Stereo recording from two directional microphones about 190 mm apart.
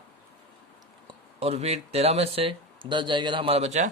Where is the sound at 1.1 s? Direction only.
30° right (ahead or behind).